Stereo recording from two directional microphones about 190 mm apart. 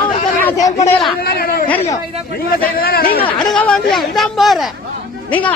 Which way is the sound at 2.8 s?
50° left (ahead or behind).